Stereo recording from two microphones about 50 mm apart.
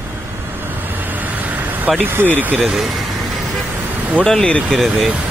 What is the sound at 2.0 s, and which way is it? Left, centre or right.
Speech, right.